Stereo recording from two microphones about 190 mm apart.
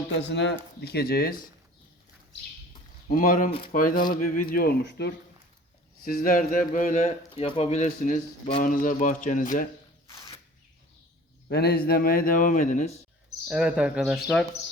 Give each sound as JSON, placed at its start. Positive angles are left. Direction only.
{"t": 0.2, "sound": "speech", "side_deg": 65}
{"t": 3.1, "sound": "a man's voice", "side_deg": 45}
{"t": 6.1, "sound": "a man's voice", "side_deg": 45}
{"t": 10.1, "sound": "a sound", "side_deg": 25}
{"t": 11.4, "sound": "a man's voice", "side_deg": 55}
{"t": 13.5, "sound": "speech", "side_deg": -5}